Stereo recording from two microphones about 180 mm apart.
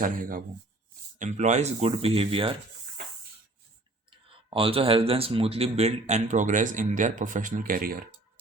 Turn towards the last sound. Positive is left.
turn(degrees=-50)  # may be behind; listen again after turning